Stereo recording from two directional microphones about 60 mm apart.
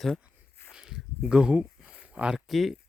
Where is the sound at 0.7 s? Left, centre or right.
Centre.